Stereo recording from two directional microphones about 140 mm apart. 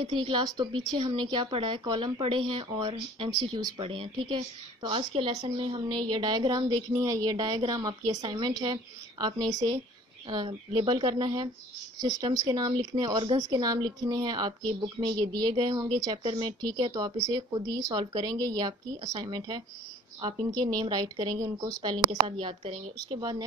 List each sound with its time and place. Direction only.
0.2 s a woman's voice: 35° right (ahead or behind)
10.2 s a woman's voice: 35° right (ahead or behind)